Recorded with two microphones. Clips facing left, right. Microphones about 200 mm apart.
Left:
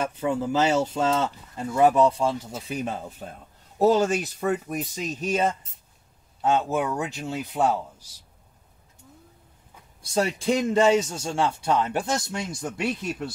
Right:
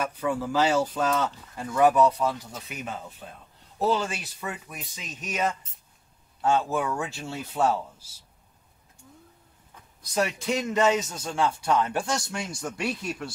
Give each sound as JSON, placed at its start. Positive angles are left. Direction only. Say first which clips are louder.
{"t": 0.0, "sound": "speech", "louder": "left 2 dB", "side_deg": 25}
{"t": 6.4, "sound": "speech", "louder": "left 1 dB", "side_deg": 20}
{"t": 10.0, "sound": "speech", "louder": "left 3 dB", "side_deg": 30}
{"t": 12.6, "sound": "speech", "louder": "left 2 dB", "side_deg": 0}